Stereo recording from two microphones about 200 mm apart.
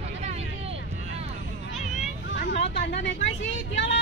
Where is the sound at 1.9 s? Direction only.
50° left (ahead or behind).